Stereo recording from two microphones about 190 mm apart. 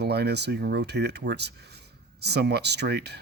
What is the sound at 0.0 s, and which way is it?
Speech, 60° right (ahead or behind).